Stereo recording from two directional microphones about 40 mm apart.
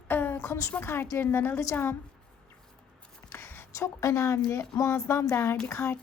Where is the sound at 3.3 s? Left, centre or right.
Left.